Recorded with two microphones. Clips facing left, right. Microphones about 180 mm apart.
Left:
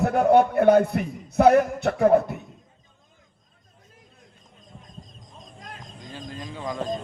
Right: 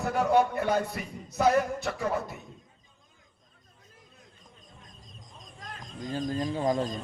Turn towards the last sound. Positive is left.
turn(degrees=-40)  # may be behind; listen again after turning